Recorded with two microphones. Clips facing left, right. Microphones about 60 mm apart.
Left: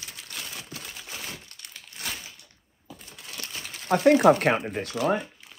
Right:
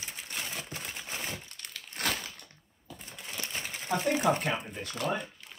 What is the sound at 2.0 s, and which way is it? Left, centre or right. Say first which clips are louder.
Crushing: right 4 dB; right.